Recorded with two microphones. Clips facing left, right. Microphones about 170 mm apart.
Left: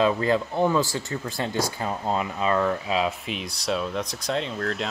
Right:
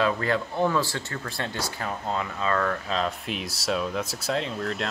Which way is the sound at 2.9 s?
Centre (ahead or behind).